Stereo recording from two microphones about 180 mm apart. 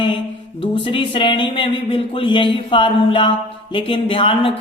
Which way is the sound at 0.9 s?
30° left (ahead or behind).